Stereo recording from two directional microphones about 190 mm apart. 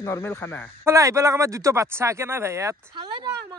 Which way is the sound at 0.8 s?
15° right (ahead or behind).